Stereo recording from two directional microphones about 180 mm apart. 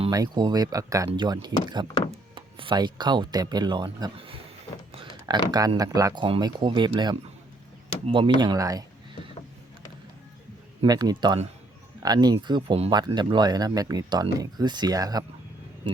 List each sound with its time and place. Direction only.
0.1 s speech: 20° right (ahead or behind)
5.5 s speech: 20° right (ahead or behind)
10.8 s speech: 20° right (ahead or behind)